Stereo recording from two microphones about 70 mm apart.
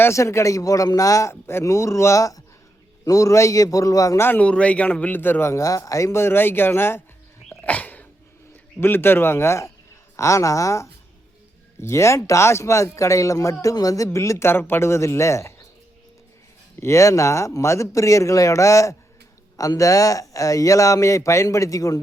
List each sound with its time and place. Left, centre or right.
0.1 s speech: left
4.4 s a man's voice: centre
5.1 s speech: left
7.6 s a sound: left
8.8 s speech: left
16.8 s speech: left